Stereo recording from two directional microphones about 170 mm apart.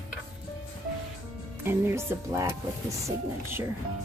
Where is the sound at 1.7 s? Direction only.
15° right (ahead or behind).